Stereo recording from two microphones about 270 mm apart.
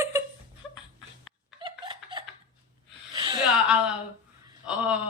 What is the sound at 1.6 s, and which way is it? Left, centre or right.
Laughter, centre.